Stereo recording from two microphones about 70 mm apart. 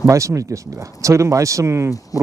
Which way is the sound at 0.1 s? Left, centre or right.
Right.